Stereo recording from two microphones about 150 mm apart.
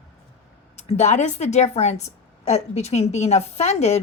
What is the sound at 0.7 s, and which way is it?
A woman's voice, 45° left (ahead or behind).